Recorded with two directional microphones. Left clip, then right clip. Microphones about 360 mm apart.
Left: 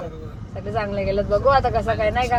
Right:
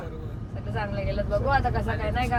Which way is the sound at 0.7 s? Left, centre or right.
Left.